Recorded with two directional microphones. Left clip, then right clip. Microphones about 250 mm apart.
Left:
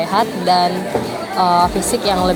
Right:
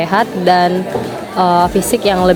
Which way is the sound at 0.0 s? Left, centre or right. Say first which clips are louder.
Right 3 dB; right.